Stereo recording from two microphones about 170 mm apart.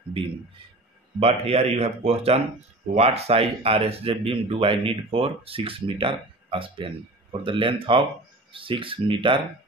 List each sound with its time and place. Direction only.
1.2 s speech: 35° right (ahead or behind)